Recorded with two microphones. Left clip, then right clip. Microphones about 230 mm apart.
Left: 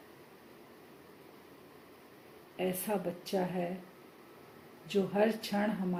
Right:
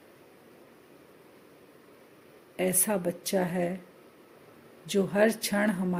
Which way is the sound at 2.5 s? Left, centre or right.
Right.